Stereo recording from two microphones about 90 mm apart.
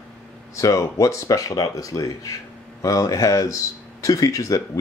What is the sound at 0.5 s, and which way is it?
Speech, 35° left (ahead or behind).